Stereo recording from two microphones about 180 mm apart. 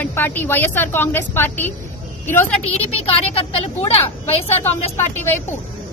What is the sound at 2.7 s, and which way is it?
A woman's voice, 35° left (ahead or behind).